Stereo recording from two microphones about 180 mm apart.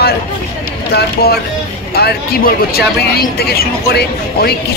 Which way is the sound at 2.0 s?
60° left (ahead or behind).